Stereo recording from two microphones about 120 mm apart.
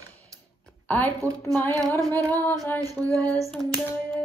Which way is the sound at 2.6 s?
20° left (ahead or behind).